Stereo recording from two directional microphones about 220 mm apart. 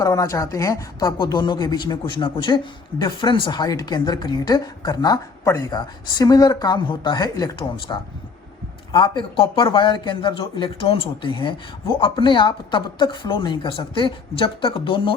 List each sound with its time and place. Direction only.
0.0 s speech: 15° left (ahead or behind)